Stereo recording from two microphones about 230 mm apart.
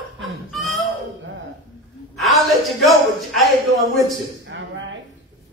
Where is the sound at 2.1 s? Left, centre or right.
Centre.